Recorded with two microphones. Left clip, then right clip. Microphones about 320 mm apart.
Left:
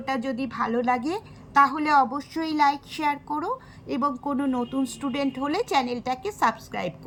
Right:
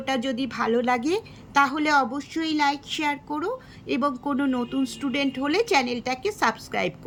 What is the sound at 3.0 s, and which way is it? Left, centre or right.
A woman's voice, centre.